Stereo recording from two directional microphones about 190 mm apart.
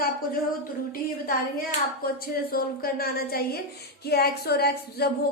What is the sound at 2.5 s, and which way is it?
A woman's voice, 50° left (ahead or behind).